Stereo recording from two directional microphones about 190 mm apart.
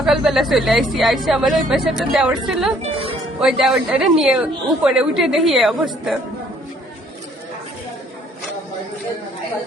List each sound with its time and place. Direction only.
0.0 s speech: centre (ahead or behind)
2.8 s speech: 30° right (ahead or behind)
3.4 s speech: centre (ahead or behind)